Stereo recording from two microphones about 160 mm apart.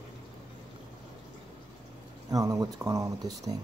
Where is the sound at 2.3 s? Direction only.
20° right (ahead or behind).